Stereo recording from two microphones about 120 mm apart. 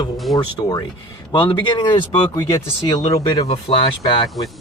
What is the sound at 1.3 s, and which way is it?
Speech, 45° left (ahead or behind).